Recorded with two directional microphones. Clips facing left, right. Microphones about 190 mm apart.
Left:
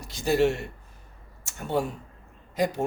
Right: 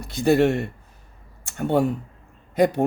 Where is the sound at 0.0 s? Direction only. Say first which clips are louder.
Right 5 dB; 60° right (ahead or behind).